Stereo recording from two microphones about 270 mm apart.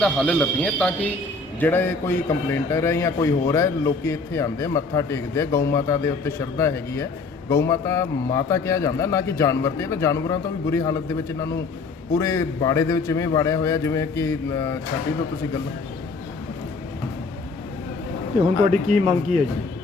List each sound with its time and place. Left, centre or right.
0.0 s a man's voice: centre
18.7 s speech: right